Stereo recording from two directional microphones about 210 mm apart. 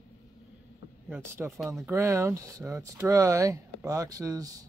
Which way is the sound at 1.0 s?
10° right (ahead or behind).